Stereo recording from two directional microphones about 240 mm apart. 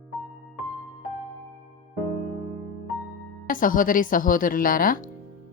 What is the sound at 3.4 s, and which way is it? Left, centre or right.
A woman's voice, left.